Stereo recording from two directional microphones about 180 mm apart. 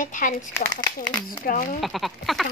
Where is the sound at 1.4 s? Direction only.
45° left (ahead or behind).